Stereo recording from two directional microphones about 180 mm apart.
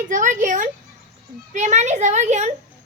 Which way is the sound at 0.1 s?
45° right (ahead or behind).